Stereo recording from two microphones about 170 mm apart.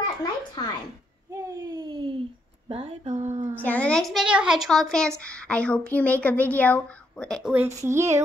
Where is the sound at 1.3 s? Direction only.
20° right (ahead or behind); by 3.5 s 45° right (ahead or behind).